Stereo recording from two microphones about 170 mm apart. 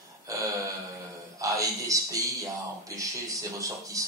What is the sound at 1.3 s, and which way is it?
A man's voice, 20° right (ahead or behind).